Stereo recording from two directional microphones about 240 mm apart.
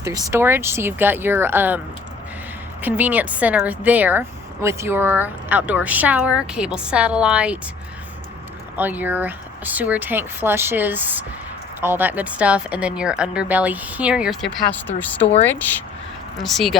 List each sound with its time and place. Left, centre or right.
0.0 s speech: centre
2.8 s speech: centre
8.7 s speech: centre
16.4 s speech: centre